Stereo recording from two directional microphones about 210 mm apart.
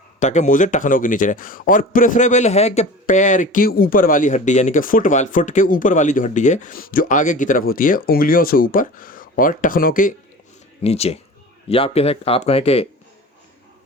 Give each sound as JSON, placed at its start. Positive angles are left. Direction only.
{"t": 0.2, "sound": "speech", "side_deg": 35}
{"t": 10.8, "sound": "speech", "side_deg": 30}